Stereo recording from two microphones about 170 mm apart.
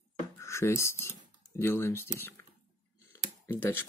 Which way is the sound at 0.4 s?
15° left (ahead or behind).